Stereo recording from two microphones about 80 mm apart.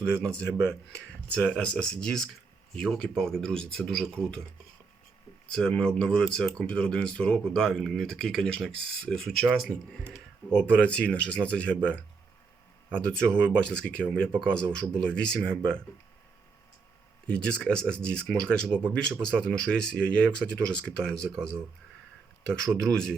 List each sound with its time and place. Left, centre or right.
0.1 s speech: centre
5.5 s speech: centre
10.5 s speech: centre
17.2 s speech: centre
22.8 s speech: centre